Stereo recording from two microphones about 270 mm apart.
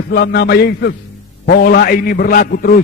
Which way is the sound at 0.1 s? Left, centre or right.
Left.